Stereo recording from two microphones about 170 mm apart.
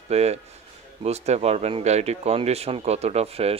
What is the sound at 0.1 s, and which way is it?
Speech, 40° right (ahead or behind).